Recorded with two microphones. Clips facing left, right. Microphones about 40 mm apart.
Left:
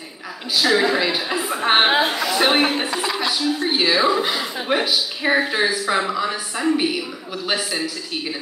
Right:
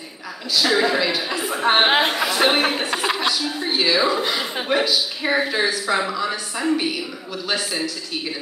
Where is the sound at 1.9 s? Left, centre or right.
Right.